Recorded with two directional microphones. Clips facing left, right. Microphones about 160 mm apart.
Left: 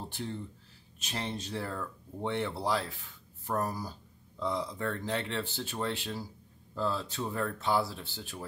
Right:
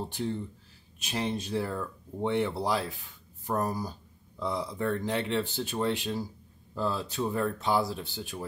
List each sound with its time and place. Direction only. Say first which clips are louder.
0.9 s speech: right 5 dB; 10° right (ahead or behind)